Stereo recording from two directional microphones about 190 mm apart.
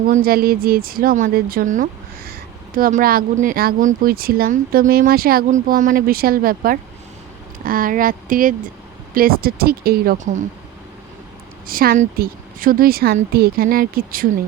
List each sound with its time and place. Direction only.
0.1 s a woman's voice: 50° right (ahead or behind)
11.7 s a woman's voice: 50° right (ahead or behind)